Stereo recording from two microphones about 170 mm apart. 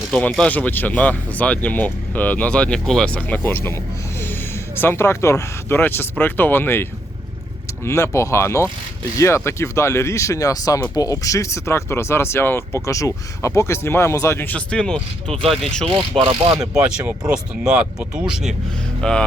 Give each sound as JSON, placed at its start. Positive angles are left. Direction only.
{"t": 0.1, "sound": "speech", "side_deg": 5}
{"t": 4.8, "sound": "speech", "side_deg": 15}
{"t": 7.9, "sound": "speech", "side_deg": 15}
{"t": 15.9, "sound": "speech", "side_deg": -30}
{"t": 16.7, "sound": "speech", "side_deg": -10}
{"t": 19.0, "sound": "speech", "side_deg": 5}